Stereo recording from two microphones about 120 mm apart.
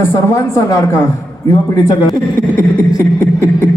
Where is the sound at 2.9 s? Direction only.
25° left (ahead or behind).